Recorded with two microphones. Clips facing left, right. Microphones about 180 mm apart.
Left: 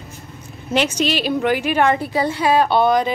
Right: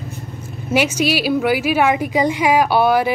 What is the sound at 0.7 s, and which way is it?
A woman's voice, 10° right (ahead or behind).